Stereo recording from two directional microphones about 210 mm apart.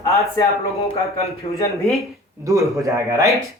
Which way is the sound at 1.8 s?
Centre (ahead or behind).